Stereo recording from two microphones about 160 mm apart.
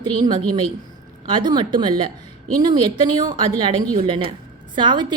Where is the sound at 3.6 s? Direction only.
30° right (ahead or behind).